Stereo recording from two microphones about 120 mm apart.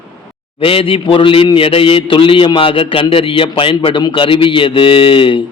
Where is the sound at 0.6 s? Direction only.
50° left (ahead or behind).